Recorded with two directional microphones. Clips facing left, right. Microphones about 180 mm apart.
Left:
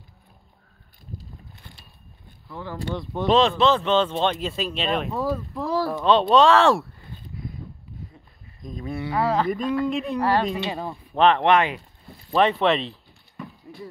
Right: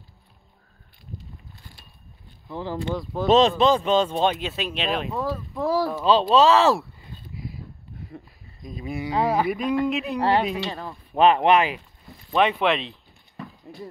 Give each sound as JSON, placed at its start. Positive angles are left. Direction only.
{"t": 2.4, "sound": "speech", "side_deg": -25}
{"t": 2.9, "sound": "speech", "side_deg": 0}
{"t": 3.4, "sound": "speech", "side_deg": -15}
{"t": 8.6, "sound": "speech", "side_deg": -10}
{"t": 10.1, "sound": "speech", "side_deg": -25}
{"t": 10.7, "sound": "speech", "side_deg": 15}
{"t": 11.1, "sound": "speech", "side_deg": -10}